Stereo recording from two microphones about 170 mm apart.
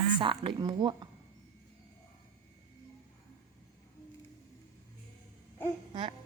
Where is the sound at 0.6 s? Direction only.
25° right (ahead or behind).